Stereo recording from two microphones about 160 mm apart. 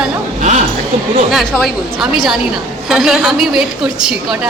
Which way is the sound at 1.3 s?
Centre (ahead or behind).